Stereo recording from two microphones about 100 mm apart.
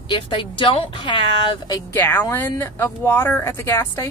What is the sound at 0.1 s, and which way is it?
A woman's voice, 55° left (ahead or behind).